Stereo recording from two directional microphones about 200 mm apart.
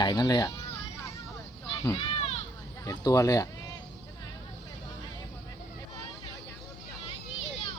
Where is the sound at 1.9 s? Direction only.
30° left (ahead or behind).